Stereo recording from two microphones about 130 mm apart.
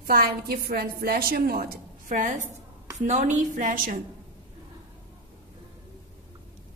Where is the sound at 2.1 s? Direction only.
80° right.